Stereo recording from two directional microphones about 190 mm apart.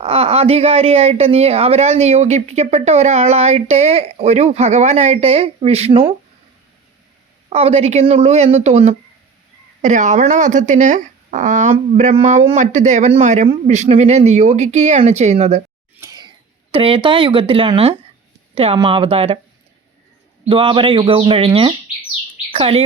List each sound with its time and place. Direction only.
0.0 s speech: 30° right (ahead or behind)
7.5 s speech: 30° right (ahead or behind)
16.0 s a sound: 20° right (ahead or behind)
16.7 s speech: 30° right (ahead or behind)
20.5 s speech: 30° right (ahead or behind)